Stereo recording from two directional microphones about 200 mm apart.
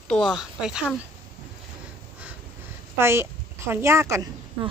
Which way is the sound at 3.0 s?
10° right (ahead or behind).